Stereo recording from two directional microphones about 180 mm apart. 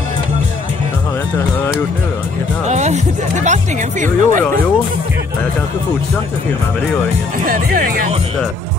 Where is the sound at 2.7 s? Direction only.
40° right (ahead or behind).